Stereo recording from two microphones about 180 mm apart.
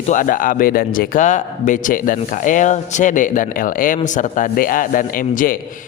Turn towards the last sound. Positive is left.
turn(degrees=50)  # may be behind; listen again after turning